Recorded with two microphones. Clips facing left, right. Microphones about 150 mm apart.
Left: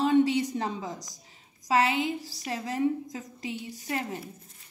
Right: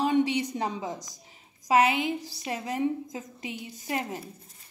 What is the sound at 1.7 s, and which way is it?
A woman's voice, 20° right (ahead or behind).